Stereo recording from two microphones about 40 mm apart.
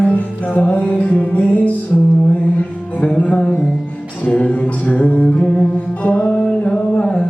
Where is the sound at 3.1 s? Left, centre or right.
Left.